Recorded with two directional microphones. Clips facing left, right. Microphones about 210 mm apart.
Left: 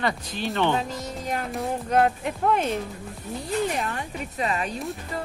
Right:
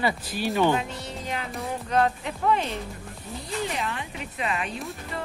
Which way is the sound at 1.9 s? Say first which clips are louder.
Left 2 dB; 50° left (ahead or behind).